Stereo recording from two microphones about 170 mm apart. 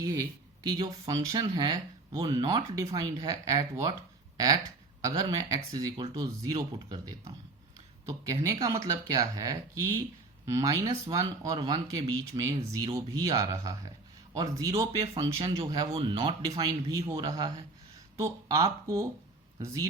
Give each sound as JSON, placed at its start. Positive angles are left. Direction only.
{"t": 0.7, "sound": "speech", "side_deg": -25}
{"t": 10.4, "sound": "speech", "side_deg": -20}
{"t": 15.0, "sound": "speech", "side_deg": -35}